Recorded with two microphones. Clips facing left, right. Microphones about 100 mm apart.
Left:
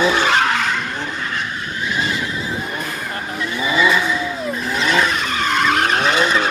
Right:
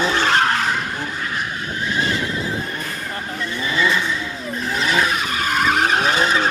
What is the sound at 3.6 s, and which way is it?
Vehicle, 15° left (ahead or behind).